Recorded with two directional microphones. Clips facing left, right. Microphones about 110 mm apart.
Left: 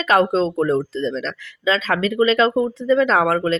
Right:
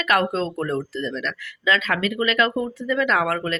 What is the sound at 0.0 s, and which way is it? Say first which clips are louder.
Speech: left 5 dB; 30° left (ahead or behind).